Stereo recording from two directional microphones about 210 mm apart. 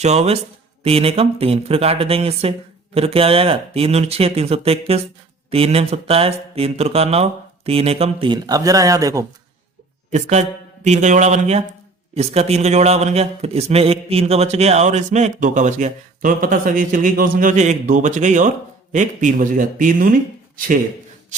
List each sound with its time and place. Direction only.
0.0 s a man's voice: 30° right (ahead or behind)
10.1 s a man's voice: 35° right (ahead or behind)